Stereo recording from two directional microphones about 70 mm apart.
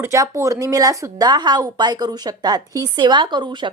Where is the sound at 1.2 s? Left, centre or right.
Right.